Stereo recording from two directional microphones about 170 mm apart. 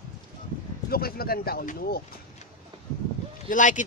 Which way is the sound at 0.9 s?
65° left (ahead or behind).